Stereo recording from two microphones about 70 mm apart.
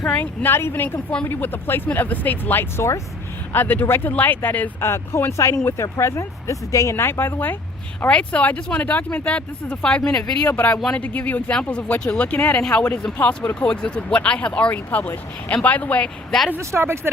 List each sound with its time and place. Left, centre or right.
0.0 s speech: centre
0.4 s speech: left
4.8 s speech: left
6.9 s speech: left
8.0 s speech: centre
16.6 s speech: right